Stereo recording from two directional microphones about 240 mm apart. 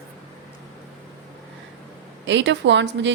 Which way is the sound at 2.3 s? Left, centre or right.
Right.